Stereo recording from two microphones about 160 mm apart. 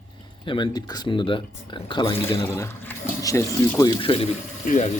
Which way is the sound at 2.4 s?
15° left (ahead or behind).